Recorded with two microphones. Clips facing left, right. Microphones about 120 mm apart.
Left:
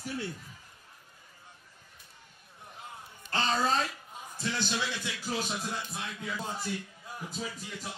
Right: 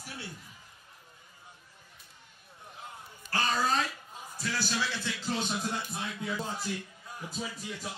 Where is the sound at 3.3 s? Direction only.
25° left (ahead or behind).